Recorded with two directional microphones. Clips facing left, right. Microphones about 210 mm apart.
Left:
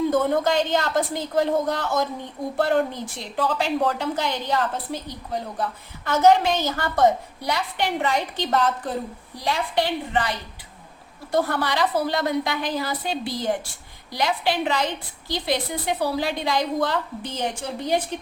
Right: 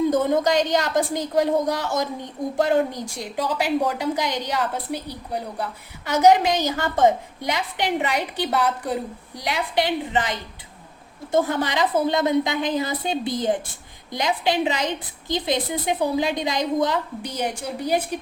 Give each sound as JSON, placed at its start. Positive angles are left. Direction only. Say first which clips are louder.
{"t": 0.1, "sound": "a woman's voice", "louder": "right 1 dB", "side_deg": -15}
{"t": 10.1, "sound": "a woman's voice", "louder": "right 1 dB", "side_deg": -20}